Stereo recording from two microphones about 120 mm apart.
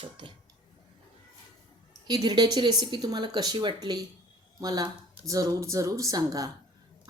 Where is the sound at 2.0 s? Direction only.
35° right (ahead or behind).